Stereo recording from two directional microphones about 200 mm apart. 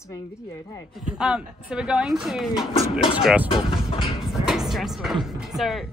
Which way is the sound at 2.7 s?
25° left (ahead or behind).